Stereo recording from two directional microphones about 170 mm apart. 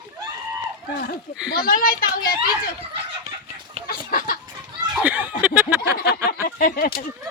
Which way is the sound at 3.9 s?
60° left (ahead or behind).